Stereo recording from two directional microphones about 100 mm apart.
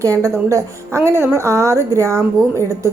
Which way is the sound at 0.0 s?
30° right (ahead or behind).